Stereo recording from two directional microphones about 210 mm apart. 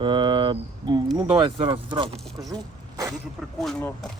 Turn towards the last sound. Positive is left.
turn(degrees=0)  # may be behind; listen again after turning